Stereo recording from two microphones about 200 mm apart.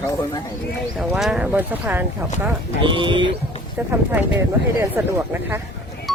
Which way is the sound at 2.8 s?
25° right (ahead or behind).